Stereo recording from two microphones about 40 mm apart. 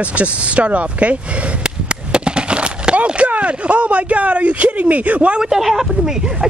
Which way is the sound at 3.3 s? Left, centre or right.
Right.